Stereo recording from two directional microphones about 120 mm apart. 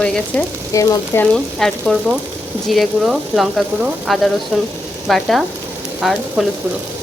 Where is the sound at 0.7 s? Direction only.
25° left (ahead or behind).